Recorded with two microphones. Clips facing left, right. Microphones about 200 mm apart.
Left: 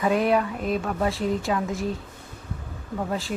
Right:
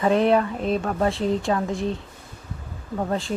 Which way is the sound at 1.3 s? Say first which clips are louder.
Right 2 dB; centre (ahead or behind).